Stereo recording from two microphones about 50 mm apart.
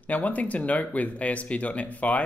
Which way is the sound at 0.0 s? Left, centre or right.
Left.